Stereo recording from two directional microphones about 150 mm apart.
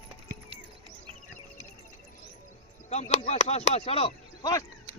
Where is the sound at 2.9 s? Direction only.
50° left (ahead or behind).